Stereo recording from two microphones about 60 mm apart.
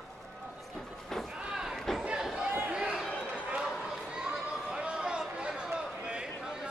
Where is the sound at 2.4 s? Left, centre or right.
Right.